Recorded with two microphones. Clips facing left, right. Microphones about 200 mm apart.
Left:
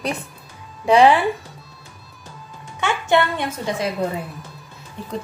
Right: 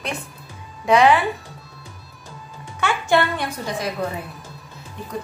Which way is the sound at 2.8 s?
20° left (ahead or behind).